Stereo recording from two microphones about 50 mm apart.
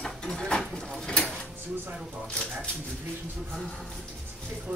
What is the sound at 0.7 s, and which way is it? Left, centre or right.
Mechanisms, centre.